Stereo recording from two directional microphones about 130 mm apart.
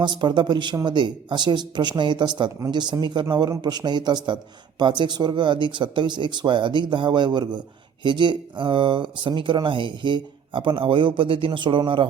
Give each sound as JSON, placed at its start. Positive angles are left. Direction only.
{"t": 0.0, "sound": "speech", "side_deg": -35}